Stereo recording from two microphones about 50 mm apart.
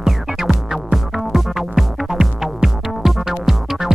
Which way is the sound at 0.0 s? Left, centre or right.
Centre.